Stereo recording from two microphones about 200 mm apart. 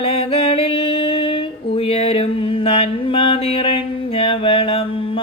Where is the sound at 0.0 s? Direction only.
30° left (ahead or behind).